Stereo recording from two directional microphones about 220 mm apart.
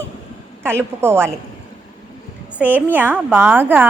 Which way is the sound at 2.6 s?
10° right (ahead or behind).